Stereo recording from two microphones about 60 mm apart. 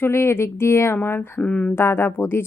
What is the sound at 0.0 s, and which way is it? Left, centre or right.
A woman's voice, left.